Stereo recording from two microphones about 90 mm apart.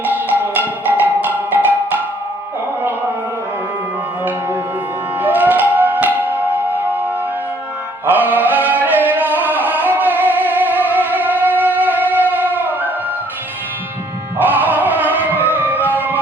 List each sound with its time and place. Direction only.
0.0 s music: 20° right (ahead or behind)
5.2 s music: 20° right (ahead or behind)
14.3 s music: 20° right (ahead or behind)